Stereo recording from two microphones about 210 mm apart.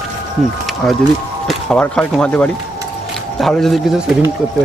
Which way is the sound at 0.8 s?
5° left (ahead or behind).